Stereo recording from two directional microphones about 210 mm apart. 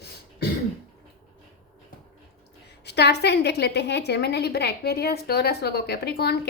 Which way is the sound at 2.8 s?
50° left (ahead or behind).